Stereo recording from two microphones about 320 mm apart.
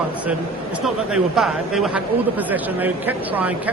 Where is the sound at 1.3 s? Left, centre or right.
Centre.